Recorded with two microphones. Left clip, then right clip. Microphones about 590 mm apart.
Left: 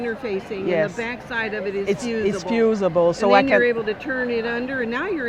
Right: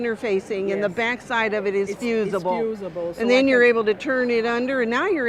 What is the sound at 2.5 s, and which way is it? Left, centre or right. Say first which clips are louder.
Speech: left 5 dB; left.